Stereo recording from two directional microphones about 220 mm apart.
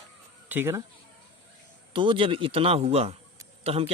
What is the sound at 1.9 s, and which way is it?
Speech, 20° right (ahead or behind).